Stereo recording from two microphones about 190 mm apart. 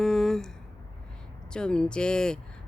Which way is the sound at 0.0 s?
5° left (ahead or behind).